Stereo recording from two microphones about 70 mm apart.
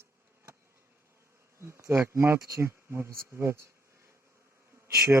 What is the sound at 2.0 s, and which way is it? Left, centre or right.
Speech, right.